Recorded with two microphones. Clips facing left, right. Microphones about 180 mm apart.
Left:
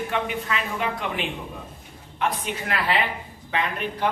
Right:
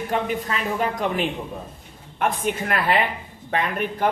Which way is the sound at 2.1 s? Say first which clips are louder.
Right 4 dB; 50° right (ahead or behind).